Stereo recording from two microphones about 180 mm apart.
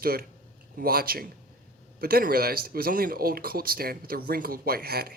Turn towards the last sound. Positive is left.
turn(degrees=-60)  # may be behind; listen again after turning